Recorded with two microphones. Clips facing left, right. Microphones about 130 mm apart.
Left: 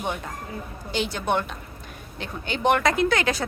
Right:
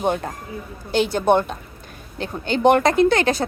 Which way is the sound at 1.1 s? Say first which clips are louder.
Right 9 dB; 40° right (ahead or behind).